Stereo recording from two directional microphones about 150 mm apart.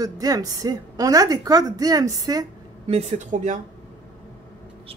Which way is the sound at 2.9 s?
50° right (ahead or behind).